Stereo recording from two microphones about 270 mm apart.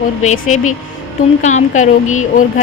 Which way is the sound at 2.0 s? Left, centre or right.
Left.